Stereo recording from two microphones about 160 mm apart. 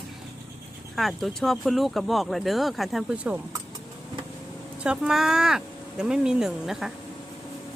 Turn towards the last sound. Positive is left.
turn(degrees=0)  # may be behind; listen again after turning